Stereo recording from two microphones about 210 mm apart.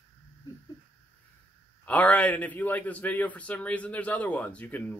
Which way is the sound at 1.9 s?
5° left (ahead or behind).